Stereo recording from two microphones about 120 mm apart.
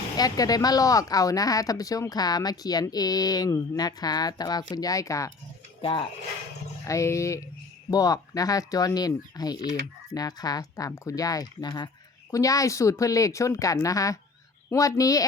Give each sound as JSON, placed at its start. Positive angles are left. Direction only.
{"t": 0.2, "sound": "speech", "side_deg": 30}
{"t": 5.8, "sound": "speech", "side_deg": 45}
{"t": 6.8, "sound": "speech", "side_deg": 25}